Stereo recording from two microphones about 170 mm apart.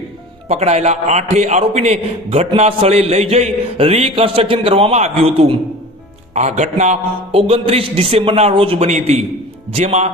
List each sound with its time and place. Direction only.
0.4 s a man's voice: 40° right (ahead or behind)